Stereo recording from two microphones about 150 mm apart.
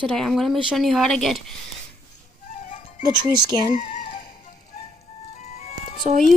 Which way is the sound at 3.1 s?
30° right (ahead or behind).